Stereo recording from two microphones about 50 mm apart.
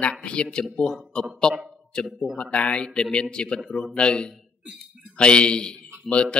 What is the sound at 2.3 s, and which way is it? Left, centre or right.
A man's voice, left.